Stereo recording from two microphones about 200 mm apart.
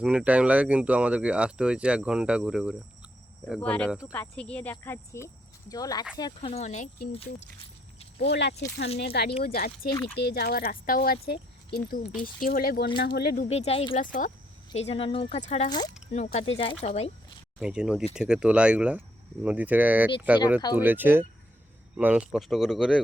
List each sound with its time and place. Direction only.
0.0 s speech: 5° right (ahead or behind); by 7.3 s 30° left (ahead or behind)
8.2 s speech: 60° left (ahead or behind); by 13.9 s 30° left (ahead or behind)
13.9 s speech: 40° left (ahead or behind)
14.7 s speech: 30° left (ahead or behind)
17.6 s speech: 5° right (ahead or behind)